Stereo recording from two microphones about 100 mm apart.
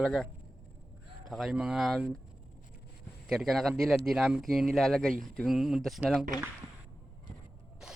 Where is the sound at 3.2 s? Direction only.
Centre (ahead or behind).